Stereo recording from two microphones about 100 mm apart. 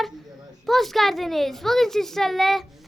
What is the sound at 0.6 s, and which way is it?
A child's voice, centre (ahead or behind).